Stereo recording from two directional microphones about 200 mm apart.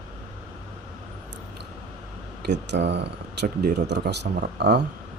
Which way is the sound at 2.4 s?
60° right (ahead or behind).